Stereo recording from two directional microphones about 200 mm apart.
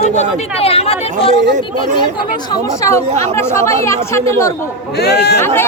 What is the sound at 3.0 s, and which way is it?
Speech, 35° right (ahead or behind).